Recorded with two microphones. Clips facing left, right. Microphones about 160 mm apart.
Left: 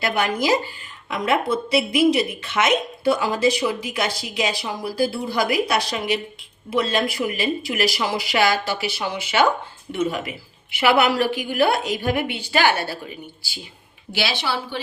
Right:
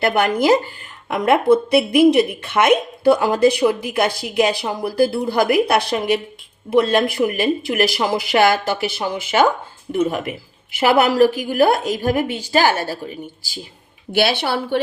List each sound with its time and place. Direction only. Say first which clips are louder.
0.0 s a woman's voice: right 5 dB; 55° right (ahead or behind)
14.1 s speech: right 7 dB; 55° right (ahead or behind)